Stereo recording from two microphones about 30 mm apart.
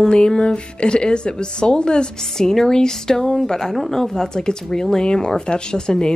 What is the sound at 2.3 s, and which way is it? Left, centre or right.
Speech, centre.